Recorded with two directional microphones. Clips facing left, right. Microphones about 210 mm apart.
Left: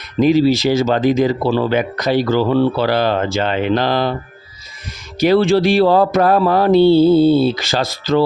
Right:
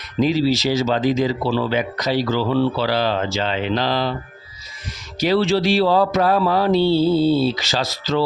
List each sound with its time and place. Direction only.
0.2 s speech: 55° left (ahead or behind)
5.2 s mantra: 55° left (ahead or behind)